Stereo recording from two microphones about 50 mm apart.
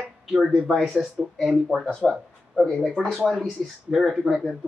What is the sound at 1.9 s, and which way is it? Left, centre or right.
Speech, centre.